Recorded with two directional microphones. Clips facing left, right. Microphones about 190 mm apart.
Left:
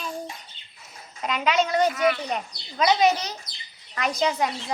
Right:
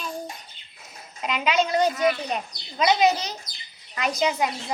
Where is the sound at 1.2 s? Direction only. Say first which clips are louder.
Even; 10° right (ahead or behind).